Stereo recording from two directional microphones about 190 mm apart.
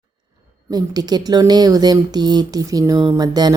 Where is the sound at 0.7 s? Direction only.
20° right (ahead or behind).